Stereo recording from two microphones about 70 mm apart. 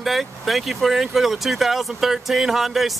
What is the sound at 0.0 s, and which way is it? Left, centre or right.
Speech, centre.